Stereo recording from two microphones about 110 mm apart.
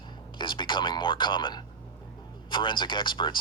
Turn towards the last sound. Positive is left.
turn(degrees=45)  # may be behind; listen again after turning